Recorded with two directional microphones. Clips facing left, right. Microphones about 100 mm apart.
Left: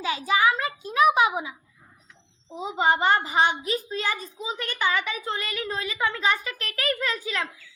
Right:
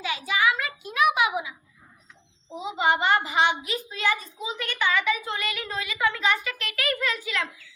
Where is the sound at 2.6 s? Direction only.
40° left (ahead or behind).